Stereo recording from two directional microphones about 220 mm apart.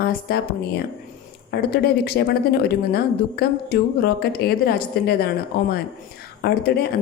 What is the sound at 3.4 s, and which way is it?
Speech, 45° left (ahead or behind).